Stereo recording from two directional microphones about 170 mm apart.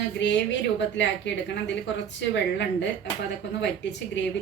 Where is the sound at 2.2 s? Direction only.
85° left.